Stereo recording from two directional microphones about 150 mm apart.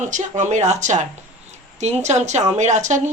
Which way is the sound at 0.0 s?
55° right (ahead or behind).